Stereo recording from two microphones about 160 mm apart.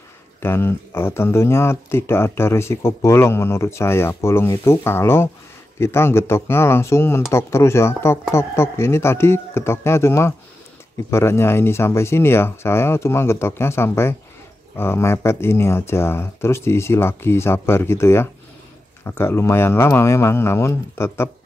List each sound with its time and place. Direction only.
0.4 s speech: 15° left (ahead or behind)